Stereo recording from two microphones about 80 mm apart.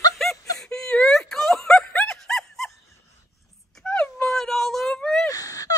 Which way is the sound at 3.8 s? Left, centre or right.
Centre.